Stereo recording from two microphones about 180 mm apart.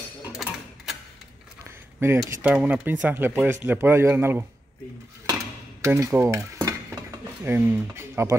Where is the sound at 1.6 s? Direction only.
15° right (ahead or behind).